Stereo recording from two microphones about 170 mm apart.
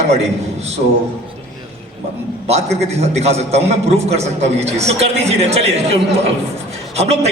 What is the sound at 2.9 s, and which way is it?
Speech, 40° right (ahead or behind).